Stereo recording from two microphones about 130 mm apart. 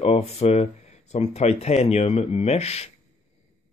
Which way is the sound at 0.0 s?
50° left (ahead or behind).